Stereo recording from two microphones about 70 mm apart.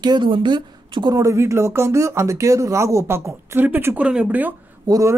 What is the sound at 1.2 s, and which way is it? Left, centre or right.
Speech, right.